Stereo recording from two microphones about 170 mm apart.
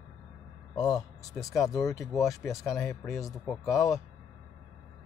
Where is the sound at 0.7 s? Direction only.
20° left (ahead or behind).